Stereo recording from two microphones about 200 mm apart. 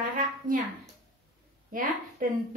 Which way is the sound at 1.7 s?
45° right (ahead or behind).